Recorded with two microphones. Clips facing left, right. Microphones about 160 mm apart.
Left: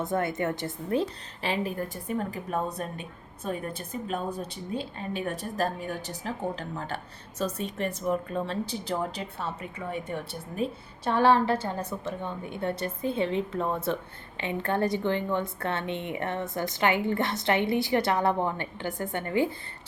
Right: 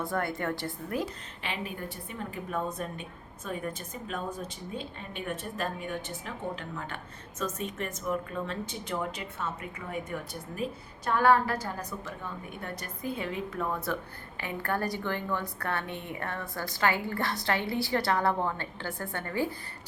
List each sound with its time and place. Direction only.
0.0 s a woman's voice: 20° left (ahead or behind)
1.4 s a woman's voice: 35° left (ahead or behind)
11.0 s a woman's voice: 30° left (ahead or behind)